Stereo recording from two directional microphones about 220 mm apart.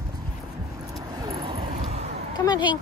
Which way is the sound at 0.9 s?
15° right (ahead or behind).